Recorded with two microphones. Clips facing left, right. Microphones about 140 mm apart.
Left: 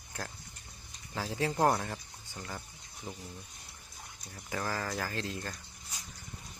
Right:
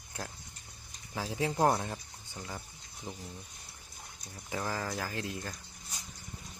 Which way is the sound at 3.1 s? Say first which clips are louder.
Even; 5° left (ahead or behind).